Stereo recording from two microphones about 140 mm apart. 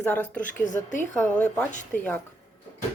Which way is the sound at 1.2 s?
10° left (ahead or behind).